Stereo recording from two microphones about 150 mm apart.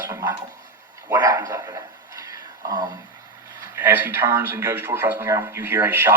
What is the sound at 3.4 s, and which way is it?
Speech, 20° right (ahead or behind).